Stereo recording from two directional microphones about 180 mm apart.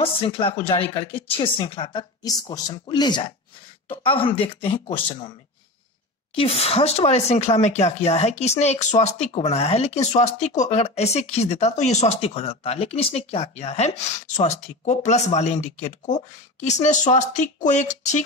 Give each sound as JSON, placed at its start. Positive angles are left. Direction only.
{"t": 0.0, "sound": "a woman's voice", "side_deg": 30}
{"t": 6.3, "sound": "speech", "side_deg": 35}